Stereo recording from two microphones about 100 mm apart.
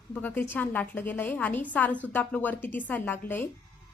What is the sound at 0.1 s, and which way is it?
A woman's voice, 15° left (ahead or behind).